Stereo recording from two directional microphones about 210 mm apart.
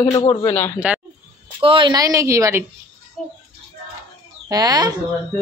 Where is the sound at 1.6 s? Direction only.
25° right (ahead or behind).